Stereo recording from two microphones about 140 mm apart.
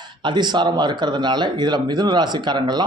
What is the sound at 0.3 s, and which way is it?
Speech, 30° right (ahead or behind).